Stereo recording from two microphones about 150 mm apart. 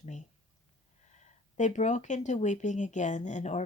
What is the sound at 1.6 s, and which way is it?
A woman's voice, 55° left (ahead or behind).